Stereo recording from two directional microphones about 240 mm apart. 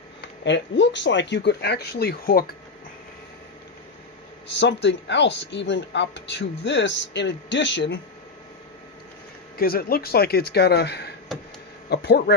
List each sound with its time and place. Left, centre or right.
0.4 s speech: left
4.6 s speech: left
9.6 s speech: left